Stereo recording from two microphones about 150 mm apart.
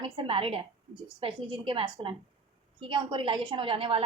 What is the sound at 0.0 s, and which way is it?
A woman's voice, 35° right (ahead or behind).